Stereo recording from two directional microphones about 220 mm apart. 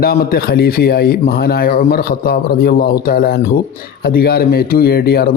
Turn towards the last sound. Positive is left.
turn(degrees=45)  # may be behind; listen again after turning